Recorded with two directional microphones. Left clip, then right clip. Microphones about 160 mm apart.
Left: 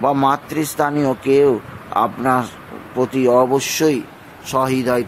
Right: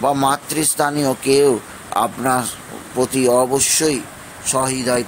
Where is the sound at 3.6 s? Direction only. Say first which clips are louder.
Left 1 dB; 20° left (ahead or behind).